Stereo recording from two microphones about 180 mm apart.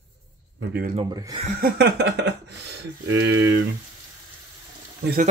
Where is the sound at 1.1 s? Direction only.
25° right (ahead or behind).